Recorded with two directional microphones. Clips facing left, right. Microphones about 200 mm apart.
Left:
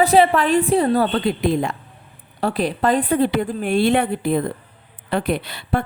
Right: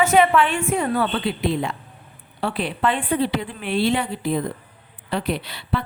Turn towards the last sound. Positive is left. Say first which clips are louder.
# left 4 dB
turn(degrees=50)  # may be behind; listen again after turning